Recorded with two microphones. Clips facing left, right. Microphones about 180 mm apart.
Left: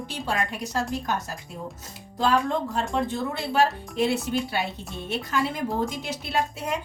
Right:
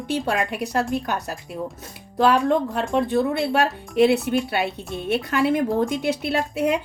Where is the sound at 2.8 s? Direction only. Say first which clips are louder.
Right 6 dB; 65° right (ahead or behind).